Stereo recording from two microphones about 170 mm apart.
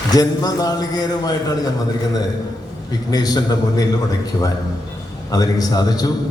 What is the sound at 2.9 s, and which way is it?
Speech, 20° left (ahead or behind).